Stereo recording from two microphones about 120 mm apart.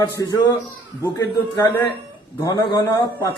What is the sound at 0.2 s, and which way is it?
Speech, 25° left (ahead or behind).